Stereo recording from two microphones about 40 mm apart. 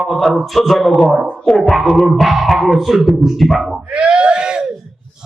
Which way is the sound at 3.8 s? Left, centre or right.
Right.